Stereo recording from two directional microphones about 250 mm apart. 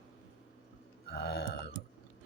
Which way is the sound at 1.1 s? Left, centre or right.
Left.